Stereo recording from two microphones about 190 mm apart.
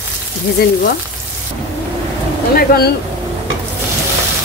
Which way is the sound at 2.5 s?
55° left (ahead or behind).